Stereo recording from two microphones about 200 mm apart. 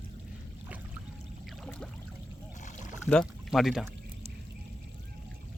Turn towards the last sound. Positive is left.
turn(degrees=0)  # may be behind; listen again after turning